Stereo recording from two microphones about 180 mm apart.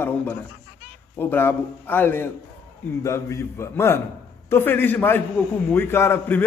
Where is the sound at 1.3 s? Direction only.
10° left (ahead or behind).